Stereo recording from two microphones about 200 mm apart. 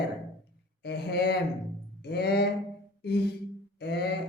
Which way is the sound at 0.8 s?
55° left (ahead or behind).